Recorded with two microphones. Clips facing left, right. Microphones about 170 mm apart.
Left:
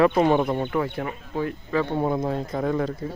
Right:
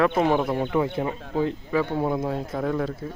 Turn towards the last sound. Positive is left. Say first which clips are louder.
# left 1 dB
turn(degrees=0)  # may be behind; listen again after turning